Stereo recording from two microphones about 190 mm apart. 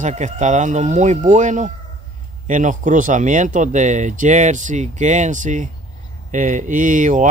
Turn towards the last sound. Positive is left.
turn(degrees=-40)  # may be behind; listen again after turning